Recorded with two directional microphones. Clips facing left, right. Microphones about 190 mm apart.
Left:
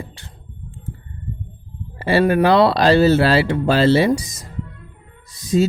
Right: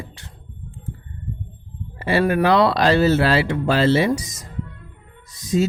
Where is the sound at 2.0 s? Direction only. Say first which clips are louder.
Left 3 dB; 30° left (ahead or behind).